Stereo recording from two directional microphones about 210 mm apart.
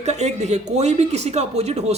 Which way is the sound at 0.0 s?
30° right (ahead or behind).